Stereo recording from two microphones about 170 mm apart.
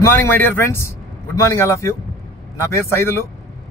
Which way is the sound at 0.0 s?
15° left (ahead or behind).